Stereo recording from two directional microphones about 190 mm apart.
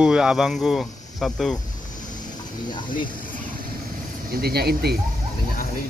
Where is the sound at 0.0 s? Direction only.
5° right (ahead or behind).